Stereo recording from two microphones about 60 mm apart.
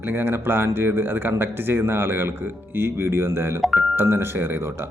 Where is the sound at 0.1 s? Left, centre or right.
Right.